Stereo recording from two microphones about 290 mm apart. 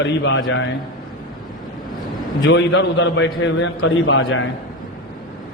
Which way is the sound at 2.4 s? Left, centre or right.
Left.